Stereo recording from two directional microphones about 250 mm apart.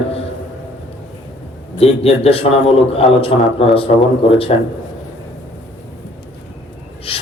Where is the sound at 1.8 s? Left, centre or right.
Left.